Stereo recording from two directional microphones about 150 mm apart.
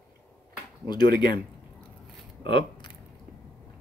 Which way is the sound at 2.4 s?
35° left (ahead or behind).